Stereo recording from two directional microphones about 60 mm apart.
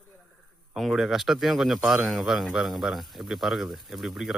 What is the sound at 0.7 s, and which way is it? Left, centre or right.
Speech, centre.